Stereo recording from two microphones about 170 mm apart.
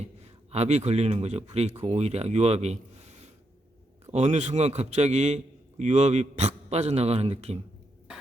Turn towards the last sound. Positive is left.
turn(degrees=-35)  # may be behind; listen again after turning